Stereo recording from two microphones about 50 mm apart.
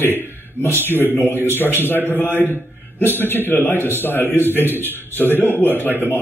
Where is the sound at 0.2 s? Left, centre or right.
Left.